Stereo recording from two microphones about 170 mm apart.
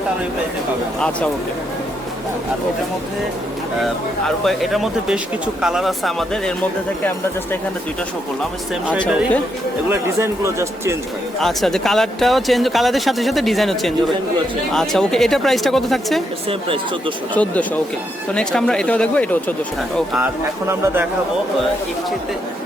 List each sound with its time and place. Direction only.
4.4 s speech: centre (ahead or behind)
9.9 s speech: 15° right (ahead or behind)
11.3 s speech: centre (ahead or behind)
16.5 s speech: 30° right (ahead or behind)
17.3 s speech: 10° left (ahead or behind)
20.1 s speech: 10° right (ahead or behind)